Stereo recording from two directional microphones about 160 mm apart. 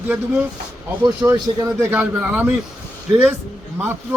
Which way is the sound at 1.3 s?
15° right (ahead or behind).